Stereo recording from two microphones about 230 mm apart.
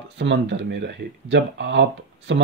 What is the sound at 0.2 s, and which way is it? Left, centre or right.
Speech, right.